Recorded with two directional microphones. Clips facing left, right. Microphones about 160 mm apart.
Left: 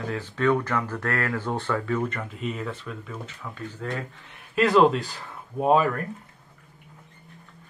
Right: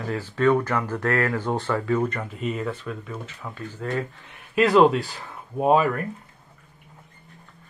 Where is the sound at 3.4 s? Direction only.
25° right (ahead or behind).